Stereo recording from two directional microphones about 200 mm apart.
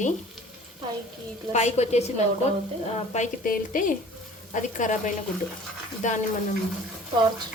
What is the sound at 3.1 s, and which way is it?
A woman's voice, 40° left (ahead or behind).